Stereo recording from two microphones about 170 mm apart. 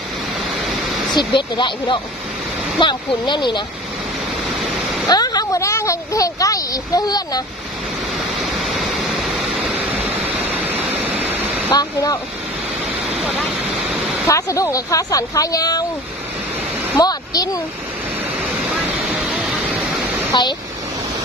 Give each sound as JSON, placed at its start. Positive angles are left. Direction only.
{"t": 1.1, "sound": "speech", "side_deg": 30}
{"t": 5.0, "sound": "speech", "side_deg": 25}
{"t": 8.5, "sound": "waterfall", "side_deg": 0}
{"t": 11.7, "sound": "speech", "side_deg": 20}
{"t": 14.2, "sound": "speech", "side_deg": 20}
{"t": 16.9, "sound": "a sound", "side_deg": 20}
{"t": 18.7, "sound": "a sound", "side_deg": -5}